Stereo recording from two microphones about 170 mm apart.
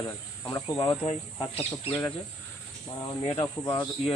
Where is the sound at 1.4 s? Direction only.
35° left (ahead or behind).